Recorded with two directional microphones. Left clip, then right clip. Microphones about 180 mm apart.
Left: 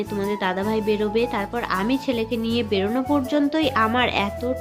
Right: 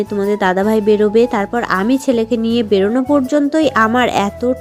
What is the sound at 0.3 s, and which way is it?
A woman's voice, 40° right (ahead or behind).